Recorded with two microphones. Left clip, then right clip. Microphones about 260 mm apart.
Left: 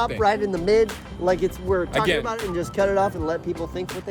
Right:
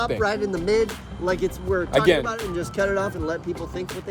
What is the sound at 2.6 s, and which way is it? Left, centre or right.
Speech, left.